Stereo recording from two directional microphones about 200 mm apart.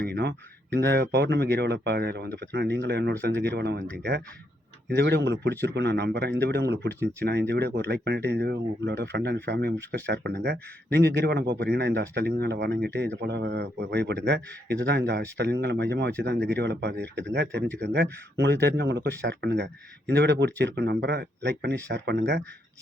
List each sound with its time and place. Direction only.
0.0 s speech: 55° right (ahead or behind)